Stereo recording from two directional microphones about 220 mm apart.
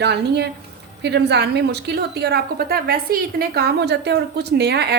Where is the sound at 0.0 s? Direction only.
50° right (ahead or behind).